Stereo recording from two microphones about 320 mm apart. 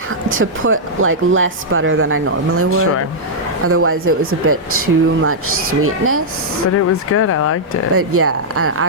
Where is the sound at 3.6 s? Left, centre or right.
Right.